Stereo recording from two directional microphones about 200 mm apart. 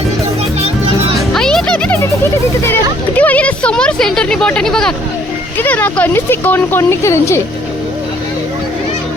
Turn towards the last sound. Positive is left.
turn(degrees=15)  # may be behind; listen again after turning